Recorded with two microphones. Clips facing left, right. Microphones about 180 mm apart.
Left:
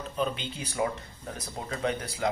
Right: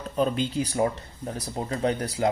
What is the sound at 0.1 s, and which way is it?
Speech, 40° right (ahead or behind).